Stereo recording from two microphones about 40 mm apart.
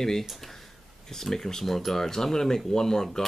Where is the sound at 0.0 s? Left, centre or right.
Centre.